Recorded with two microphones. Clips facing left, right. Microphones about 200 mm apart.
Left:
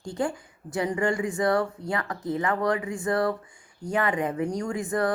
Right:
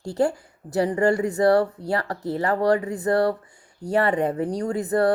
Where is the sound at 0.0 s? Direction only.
40° right (ahead or behind).